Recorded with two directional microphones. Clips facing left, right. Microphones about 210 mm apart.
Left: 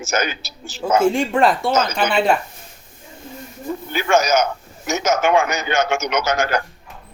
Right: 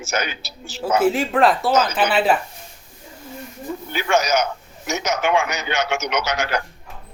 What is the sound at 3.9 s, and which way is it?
Speech, 45° left (ahead or behind).